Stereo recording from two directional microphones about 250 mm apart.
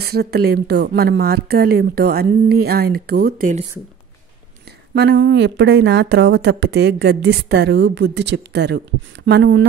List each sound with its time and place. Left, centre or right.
0.0 s speech: right
4.9 s a woman's voice: right